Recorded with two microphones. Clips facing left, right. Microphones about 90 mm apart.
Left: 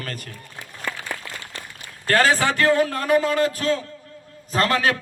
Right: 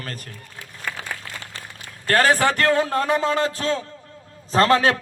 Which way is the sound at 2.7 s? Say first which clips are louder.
Left 1 dB; 25° right (ahead or behind).